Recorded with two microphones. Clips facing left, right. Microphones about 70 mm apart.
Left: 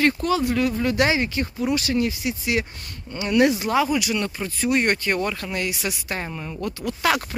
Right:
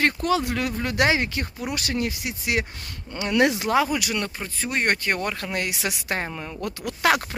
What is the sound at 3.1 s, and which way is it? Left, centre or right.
Speech, right.